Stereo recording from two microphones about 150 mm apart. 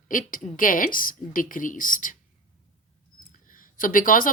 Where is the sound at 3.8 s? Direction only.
65° left (ahead or behind).